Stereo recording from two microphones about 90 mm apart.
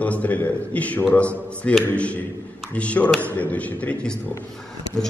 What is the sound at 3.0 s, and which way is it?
Speech, 20° left (ahead or behind).